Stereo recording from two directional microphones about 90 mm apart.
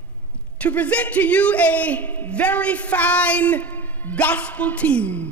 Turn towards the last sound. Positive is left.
turn(degrees=15)  # may be behind; listen again after turning